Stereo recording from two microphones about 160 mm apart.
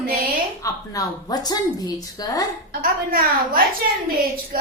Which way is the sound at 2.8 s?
65° right (ahead or behind).